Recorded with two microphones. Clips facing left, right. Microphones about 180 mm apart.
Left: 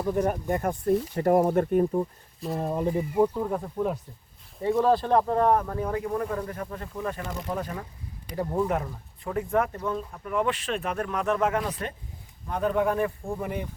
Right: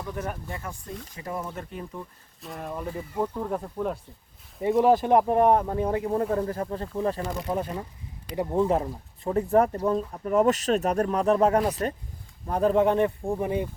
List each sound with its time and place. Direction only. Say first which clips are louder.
0.0 s speech: left 8 dB; 35° left (ahead or behind)
2.5 s speech: left 6 dB; 35° left (ahead or behind)
2.8 s speech: left 7 dB; 20° left (ahead or behind)
3.3 s speech: left 2 dB; 5° left (ahead or behind)
4.6 s speech: right 2 dB; 15° right (ahead or behind)